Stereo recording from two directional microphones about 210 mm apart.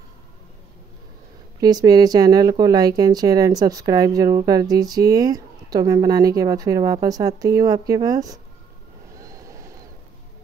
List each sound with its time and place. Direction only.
1.6 s speech: 20° right (ahead or behind)